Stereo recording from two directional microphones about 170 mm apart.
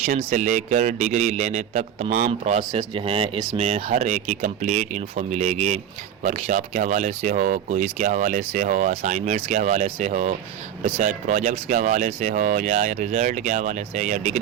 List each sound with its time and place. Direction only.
0.2 s speech: 45° right (ahead or behind)
2.6 s speech: 30° right (ahead or behind)